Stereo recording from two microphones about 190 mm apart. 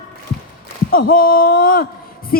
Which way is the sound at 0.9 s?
50° left (ahead or behind).